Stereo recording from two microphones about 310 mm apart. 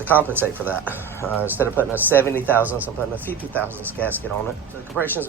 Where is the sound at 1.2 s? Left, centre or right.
Centre.